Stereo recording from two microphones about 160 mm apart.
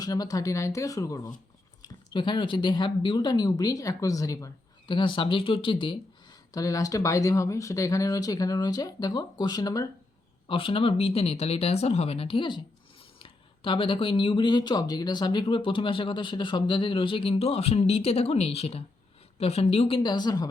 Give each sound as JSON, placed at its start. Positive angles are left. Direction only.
{"t": 0.0, "sound": "speech", "side_deg": 25}
{"t": 6.5, "sound": "speech", "side_deg": 20}
{"t": 10.5, "sound": "speech", "side_deg": 35}
{"t": 20.0, "sound": "speech", "side_deg": 25}